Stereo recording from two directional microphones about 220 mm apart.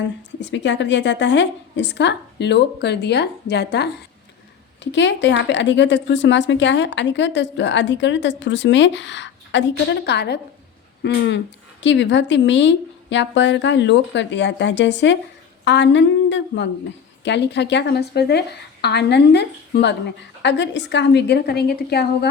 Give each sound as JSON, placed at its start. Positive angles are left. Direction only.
{"t": 0.3, "sound": "a woman's voice", "side_deg": 55}